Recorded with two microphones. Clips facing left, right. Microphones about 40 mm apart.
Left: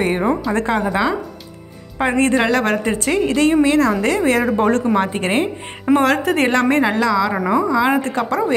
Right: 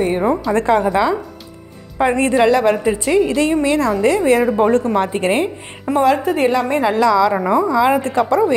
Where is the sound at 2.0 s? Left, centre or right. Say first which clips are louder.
Right 1 dB; left.